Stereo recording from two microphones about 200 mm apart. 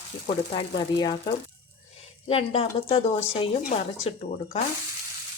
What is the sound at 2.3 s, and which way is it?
Speech, 30° left (ahead or behind).